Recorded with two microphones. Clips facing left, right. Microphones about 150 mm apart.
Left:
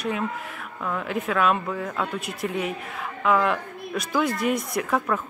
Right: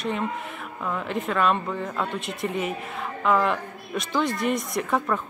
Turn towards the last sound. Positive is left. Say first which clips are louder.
# even
turn(degrees=0)  # may be behind; listen again after turning